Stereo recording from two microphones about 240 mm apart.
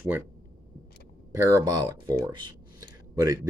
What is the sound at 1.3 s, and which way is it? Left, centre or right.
Speech, centre.